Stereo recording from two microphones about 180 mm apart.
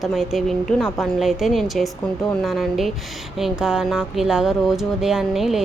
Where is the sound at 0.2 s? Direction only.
Centre (ahead or behind).